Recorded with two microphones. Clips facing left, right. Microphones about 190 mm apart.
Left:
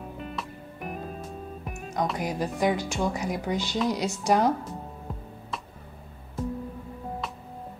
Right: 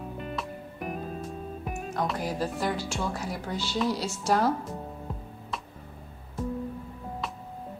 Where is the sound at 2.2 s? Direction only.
15° left (ahead or behind).